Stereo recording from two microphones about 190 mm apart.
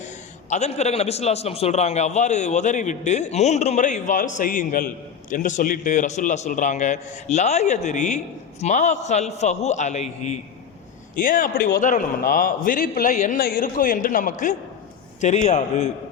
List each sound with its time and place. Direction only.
0.5 s a man's voice: 35° left (ahead or behind)